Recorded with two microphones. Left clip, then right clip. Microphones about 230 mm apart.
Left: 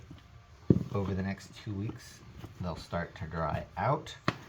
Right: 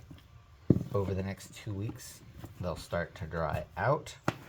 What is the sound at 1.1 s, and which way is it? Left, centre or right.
Speech, right.